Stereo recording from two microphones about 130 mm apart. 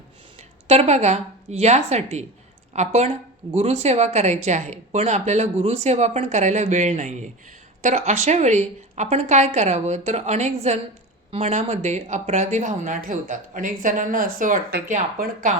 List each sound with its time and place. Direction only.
0.7 s speech: 55° right (ahead or behind); by 15.5 s 80° right